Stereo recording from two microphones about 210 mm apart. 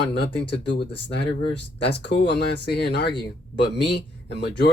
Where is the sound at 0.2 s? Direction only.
50° left (ahead or behind).